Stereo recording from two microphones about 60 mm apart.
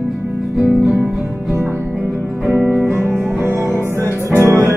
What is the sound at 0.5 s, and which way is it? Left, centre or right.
Music, centre.